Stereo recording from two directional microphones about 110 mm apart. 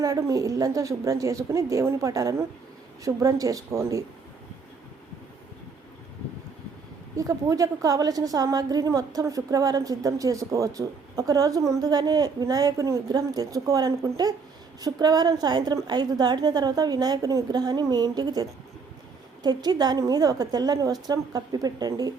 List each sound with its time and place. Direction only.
0.0 s a woman's voice: 30° right (ahead or behind)
7.2 s a woman's voice: 30° right (ahead or behind)